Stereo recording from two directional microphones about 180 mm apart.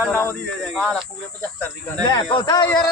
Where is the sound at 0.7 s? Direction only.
Centre (ahead or behind).